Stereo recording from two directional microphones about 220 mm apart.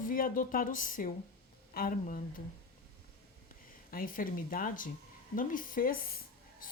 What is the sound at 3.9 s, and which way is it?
A woman's voice, 40° left (ahead or behind).